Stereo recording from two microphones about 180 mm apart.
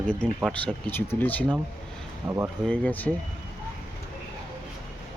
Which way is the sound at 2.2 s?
15° right (ahead or behind).